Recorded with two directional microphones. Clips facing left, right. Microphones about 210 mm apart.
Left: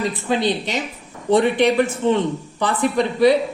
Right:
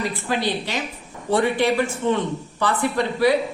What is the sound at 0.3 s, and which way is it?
Speech, 20° left (ahead or behind).